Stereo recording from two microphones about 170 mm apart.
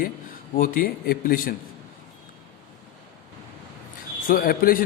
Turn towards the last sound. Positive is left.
turn(degrees=55)  # may be behind; listen again after turning